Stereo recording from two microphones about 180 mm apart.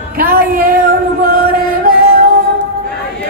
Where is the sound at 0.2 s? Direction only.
55° right (ahead or behind).